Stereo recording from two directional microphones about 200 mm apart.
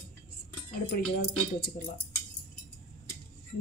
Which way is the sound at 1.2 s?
50° left (ahead or behind).